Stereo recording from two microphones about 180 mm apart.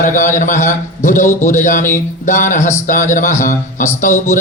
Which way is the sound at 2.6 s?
15° left (ahead or behind).